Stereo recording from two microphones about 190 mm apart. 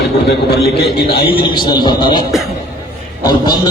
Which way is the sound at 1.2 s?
25° left (ahead or behind).